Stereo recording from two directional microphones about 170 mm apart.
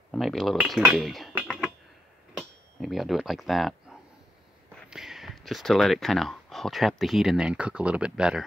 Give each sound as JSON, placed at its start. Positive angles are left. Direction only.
{"t": 0.1, "sound": "speech", "side_deg": 0}
{"t": 4.8, "sound": "speech", "side_deg": 0}